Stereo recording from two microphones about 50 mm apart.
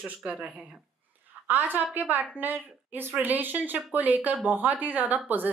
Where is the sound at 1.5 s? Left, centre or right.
Right.